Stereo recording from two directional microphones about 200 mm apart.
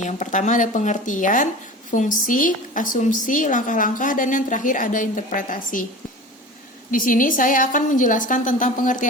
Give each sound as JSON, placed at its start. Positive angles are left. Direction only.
{"t": 0.0, "sound": "a woman's voice", "side_deg": 40}
{"t": 6.9, "sound": "a woman's voice", "side_deg": 45}